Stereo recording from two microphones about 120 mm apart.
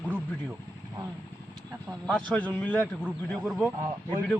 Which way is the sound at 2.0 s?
5° left (ahead or behind).